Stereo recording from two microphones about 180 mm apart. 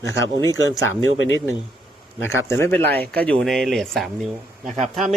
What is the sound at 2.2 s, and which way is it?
Speech, 15° left (ahead or behind).